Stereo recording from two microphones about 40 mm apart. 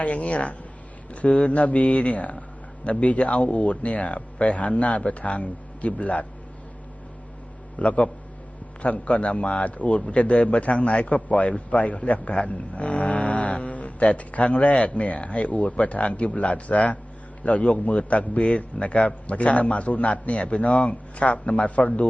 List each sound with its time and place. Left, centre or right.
0.0 s a man's voice: left
7.8 s a man's voice: left